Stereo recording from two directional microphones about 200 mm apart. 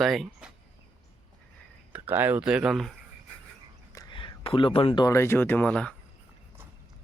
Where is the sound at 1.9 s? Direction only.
10° right (ahead or behind).